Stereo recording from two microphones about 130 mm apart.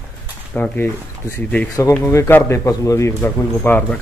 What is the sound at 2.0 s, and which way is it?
A man's voice, 20° left (ahead or behind).